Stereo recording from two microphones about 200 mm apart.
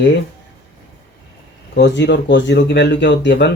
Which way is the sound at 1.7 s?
60° left (ahead or behind).